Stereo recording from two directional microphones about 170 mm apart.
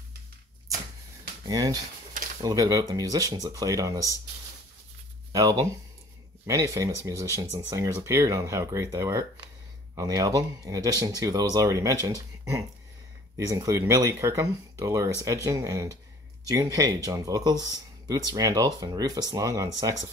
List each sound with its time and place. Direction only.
1.4 s speech: 20° right (ahead or behind)
5.3 s speech: 20° right (ahead or behind)
13.5 s speech: 20° right (ahead or behind)